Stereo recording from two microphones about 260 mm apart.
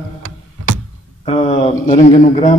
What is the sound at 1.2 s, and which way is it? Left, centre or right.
A man's voice, left.